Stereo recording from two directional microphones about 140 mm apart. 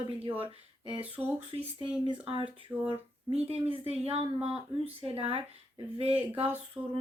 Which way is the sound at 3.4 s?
45° right (ahead or behind).